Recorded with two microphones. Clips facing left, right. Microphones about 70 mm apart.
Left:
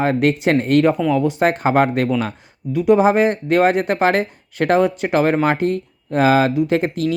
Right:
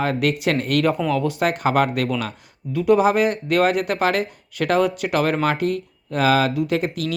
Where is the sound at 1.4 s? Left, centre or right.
Left.